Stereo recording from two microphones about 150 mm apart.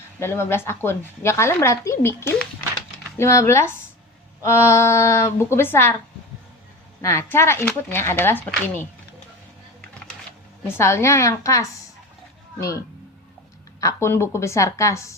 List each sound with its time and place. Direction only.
0.2 s a woman's voice: 15° left (ahead or behind)
7.0 s a woman's voice: 20° left (ahead or behind)
10.8 s a woman's voice: 20° left (ahead or behind)
13.8 s a woman's voice: 15° left (ahead or behind)